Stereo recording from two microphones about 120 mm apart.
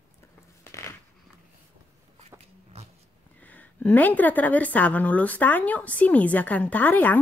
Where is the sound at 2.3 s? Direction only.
60° right (ahead or behind).